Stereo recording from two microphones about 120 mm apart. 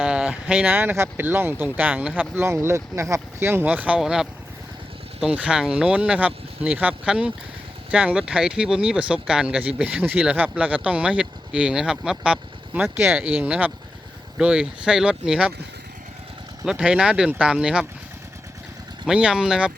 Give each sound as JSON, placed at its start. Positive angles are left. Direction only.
{"t": 0.0, "sound": "speech", "side_deg": -10}
{"t": 16.6, "sound": "speech", "side_deg": -5}
{"t": 19.0, "sound": "speech", "side_deg": -5}